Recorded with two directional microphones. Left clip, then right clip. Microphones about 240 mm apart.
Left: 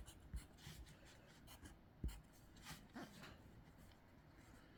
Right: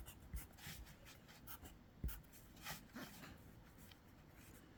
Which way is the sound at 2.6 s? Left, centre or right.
Centre.